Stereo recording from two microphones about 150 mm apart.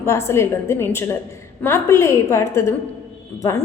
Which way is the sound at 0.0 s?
15° left (ahead or behind).